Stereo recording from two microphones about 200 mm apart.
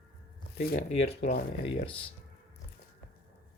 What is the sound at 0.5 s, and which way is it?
Speech, 50° left (ahead or behind).